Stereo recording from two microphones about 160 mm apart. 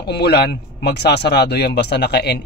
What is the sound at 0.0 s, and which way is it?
Speech, 90° left.